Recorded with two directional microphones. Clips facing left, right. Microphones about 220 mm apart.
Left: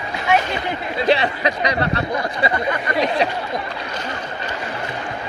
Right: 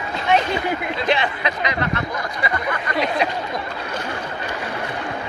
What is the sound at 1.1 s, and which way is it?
Speech, 35° left (ahead or behind).